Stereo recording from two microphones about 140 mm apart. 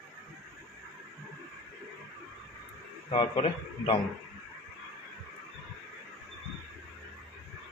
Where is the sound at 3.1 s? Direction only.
40° left (ahead or behind).